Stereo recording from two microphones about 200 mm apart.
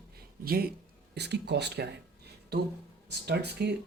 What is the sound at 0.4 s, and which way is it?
Speech, 50° right (ahead or behind).